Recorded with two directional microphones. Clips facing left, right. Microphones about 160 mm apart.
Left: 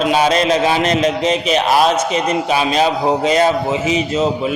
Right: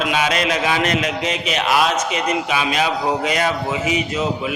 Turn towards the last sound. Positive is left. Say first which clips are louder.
# left 5 dB
turn(degrees=30)  # may be behind; listen again after turning